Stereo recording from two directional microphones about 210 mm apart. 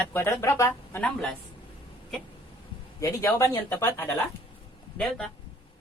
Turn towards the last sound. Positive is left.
turn(degrees=5)  # may be behind; listen again after turning